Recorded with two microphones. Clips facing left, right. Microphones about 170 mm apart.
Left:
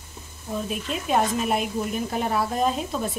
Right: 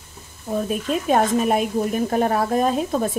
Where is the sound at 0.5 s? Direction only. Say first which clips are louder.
Right 6 dB; 45° right (ahead or behind).